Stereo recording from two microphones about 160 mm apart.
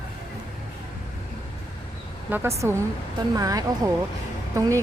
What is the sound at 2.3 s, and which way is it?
Speech, 10° right (ahead or behind).